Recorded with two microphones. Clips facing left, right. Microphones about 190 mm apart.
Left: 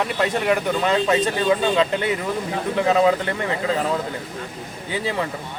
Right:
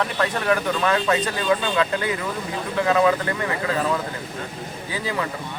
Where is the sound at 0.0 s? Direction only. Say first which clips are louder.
Left 2 dB; 20° left (ahead or behind).